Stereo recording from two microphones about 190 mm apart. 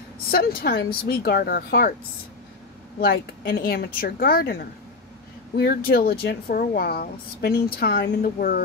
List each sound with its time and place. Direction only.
0.3 s a woman's voice: 50° left (ahead or behind)
3.0 s a woman's voice: 55° left (ahead or behind)